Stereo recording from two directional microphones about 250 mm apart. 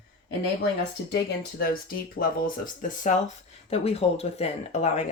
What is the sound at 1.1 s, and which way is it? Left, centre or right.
Speech, left.